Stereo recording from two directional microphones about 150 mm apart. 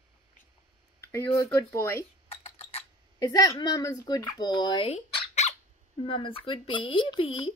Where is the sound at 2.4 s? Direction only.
40° left (ahead or behind).